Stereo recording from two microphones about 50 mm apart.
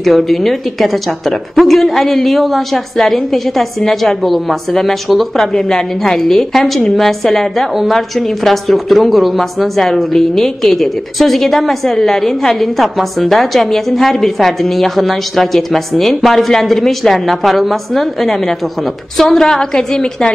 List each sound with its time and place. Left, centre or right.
0.0 s a woman's voice: centre